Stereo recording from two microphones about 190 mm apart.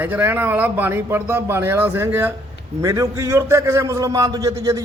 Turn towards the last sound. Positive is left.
turn(degrees=-15)  # may be behind; listen again after turning